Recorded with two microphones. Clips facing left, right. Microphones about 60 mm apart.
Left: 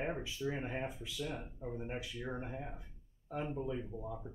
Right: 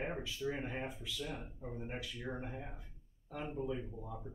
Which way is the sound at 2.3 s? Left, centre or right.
Centre.